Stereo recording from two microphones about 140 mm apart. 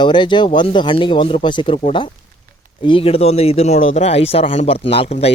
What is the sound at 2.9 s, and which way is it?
A man's voice, 40° left (ahead or behind).